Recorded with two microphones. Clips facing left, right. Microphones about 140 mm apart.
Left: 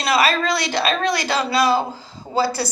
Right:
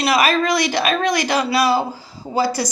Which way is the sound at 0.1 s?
15° right (ahead or behind).